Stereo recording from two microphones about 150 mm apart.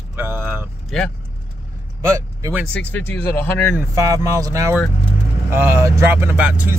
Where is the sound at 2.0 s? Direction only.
20° right (ahead or behind).